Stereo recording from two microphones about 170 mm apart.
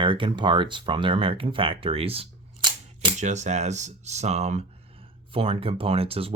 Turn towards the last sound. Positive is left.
turn(degrees=-35)  # may be behind; listen again after turning